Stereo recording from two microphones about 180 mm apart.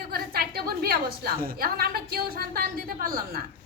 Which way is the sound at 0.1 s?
60° right (ahead or behind).